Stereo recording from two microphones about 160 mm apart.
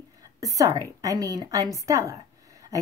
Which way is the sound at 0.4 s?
20° right (ahead or behind).